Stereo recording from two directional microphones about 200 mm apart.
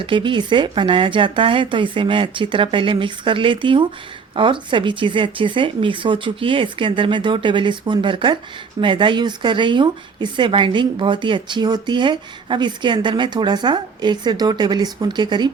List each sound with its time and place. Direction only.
0.0 s speech: 25° right (ahead or behind)